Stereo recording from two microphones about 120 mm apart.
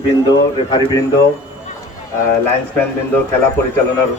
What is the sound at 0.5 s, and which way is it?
Speech, 40° left (ahead or behind).